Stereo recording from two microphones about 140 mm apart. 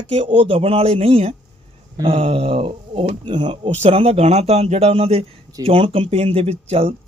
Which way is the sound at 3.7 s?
50° right (ahead or behind).